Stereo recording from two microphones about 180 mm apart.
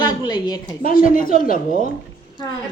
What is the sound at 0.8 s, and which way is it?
Speech, 50° left (ahead or behind).